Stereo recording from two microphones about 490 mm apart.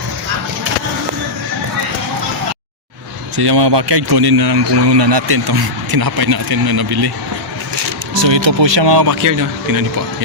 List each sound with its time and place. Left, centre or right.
3.3 s a man's voice: right
8.2 s a man's voice: right